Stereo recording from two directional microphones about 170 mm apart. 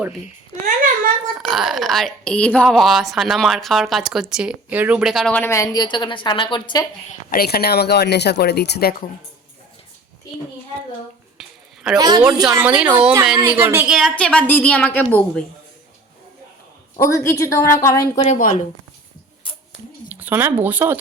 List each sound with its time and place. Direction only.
1.4 s a woman's voice: centre (ahead or behind); by 6.8 s 30° left (ahead or behind)
7.3 s speech: 65° left (ahead or behind)
11.3 s a sound: centre (ahead or behind)
11.9 s a woman's voice: 25° right (ahead or behind)
12.5 s speech: 10° right (ahead or behind)
13.9 s a woman's voice: 5° left (ahead or behind)
17.0 s a woman's voice: 20° left (ahead or behind)
18.2 s a woman's voice: 45° left (ahead or behind)
20.1 s speech: 10° right (ahead or behind)